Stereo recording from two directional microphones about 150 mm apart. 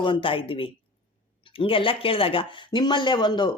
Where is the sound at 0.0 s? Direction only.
35° left (ahead or behind).